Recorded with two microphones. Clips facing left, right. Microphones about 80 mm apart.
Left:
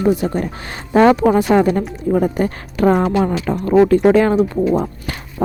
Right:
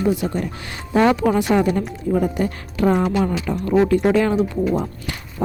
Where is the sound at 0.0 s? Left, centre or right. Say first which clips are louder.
Left 4 dB; left.